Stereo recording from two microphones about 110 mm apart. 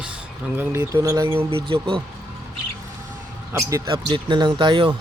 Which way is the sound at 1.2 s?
50° right (ahead or behind).